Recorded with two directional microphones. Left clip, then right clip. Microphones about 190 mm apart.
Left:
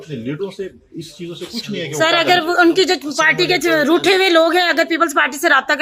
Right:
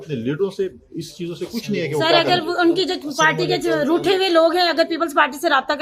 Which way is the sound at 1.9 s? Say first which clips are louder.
Left 3 dB; 20° left (ahead or behind).